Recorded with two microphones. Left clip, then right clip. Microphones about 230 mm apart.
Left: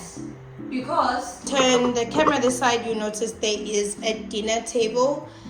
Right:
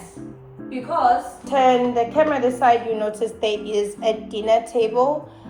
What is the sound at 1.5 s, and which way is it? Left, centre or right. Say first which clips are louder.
A woman's voice: right 3 dB; centre.